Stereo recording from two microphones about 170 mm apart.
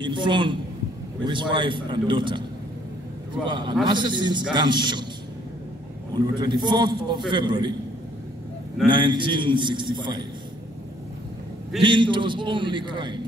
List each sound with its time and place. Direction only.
0.0 s a man's voice: 30° right (ahead or behind)
3.4 s a man's voice: 30° right (ahead or behind)
6.1 s a man's voice: 25° right (ahead or behind)
8.8 s a man's voice: 25° right (ahead or behind)
11.8 s a man's voice: 30° right (ahead or behind)